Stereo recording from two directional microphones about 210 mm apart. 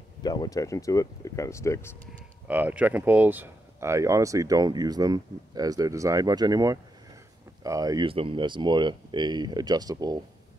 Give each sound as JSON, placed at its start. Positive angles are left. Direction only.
{"t": 0.2, "sound": "speech", "side_deg": 20}
{"t": 2.4, "sound": "speech", "side_deg": -5}